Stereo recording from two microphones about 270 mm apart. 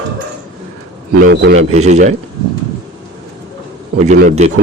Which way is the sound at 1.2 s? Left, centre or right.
Right.